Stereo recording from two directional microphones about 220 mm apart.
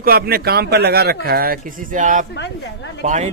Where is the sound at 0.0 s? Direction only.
45° right (ahead or behind).